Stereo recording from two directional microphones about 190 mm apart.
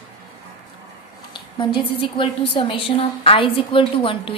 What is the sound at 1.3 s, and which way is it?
A woman's voice, 25° left (ahead or behind).